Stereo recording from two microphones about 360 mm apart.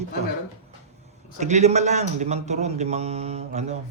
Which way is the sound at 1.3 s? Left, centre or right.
Centre.